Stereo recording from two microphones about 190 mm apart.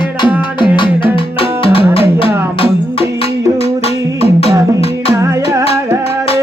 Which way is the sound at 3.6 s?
30° left (ahead or behind).